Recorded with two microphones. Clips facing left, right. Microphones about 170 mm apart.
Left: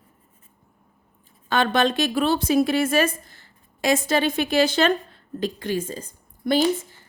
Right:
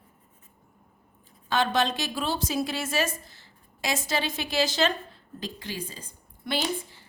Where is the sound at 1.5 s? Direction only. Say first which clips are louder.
Left 4 dB; 55° left (ahead or behind).